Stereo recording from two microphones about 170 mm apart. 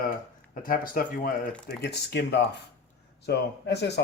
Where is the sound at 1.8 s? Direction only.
75° left (ahead or behind).